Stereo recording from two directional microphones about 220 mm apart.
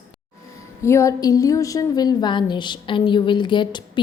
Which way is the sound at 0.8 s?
10° left (ahead or behind).